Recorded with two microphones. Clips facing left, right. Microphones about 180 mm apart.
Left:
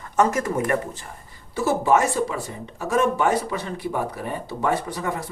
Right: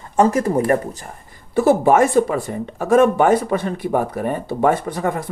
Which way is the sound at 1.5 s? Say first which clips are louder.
Right 6 dB; 55° right (ahead or behind).